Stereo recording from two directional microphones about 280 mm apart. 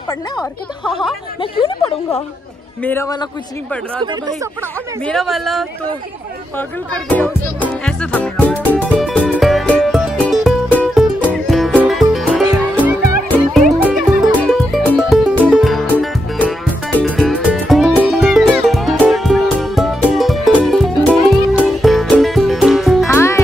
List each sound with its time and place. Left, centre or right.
1.4 s a woman's voice: centre
4.0 s speech: centre
5.0 s a woman's voice: centre
6.9 s music: centre